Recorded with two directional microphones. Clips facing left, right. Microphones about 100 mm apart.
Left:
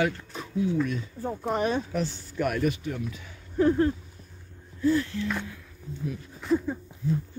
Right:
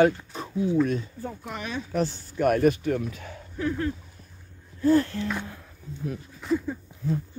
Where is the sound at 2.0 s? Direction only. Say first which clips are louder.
Right 3 dB; 40° right (ahead or behind).